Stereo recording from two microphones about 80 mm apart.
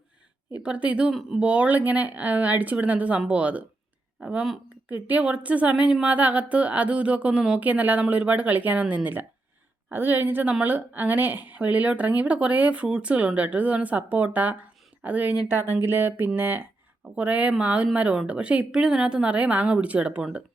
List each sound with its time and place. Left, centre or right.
0.6 s speech: centre
4.9 s speech: right